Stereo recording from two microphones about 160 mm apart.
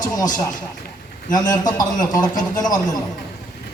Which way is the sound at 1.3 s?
25° left (ahead or behind).